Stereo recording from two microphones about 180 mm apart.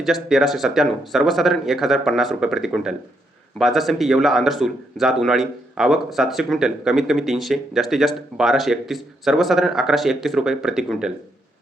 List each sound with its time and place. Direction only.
0.0 s speech: centre (ahead or behind)